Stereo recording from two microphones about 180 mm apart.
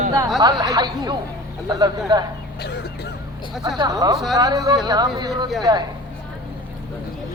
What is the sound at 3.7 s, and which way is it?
Speech, 20° right (ahead or behind).